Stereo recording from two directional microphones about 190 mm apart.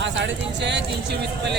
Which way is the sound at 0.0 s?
65° right (ahead or behind).